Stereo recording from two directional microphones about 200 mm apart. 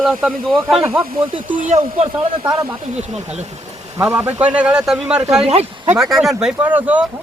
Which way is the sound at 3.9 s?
15° right (ahead or behind).